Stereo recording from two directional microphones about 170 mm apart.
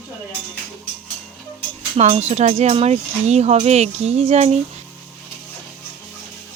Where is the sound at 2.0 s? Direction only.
40° right (ahead or behind).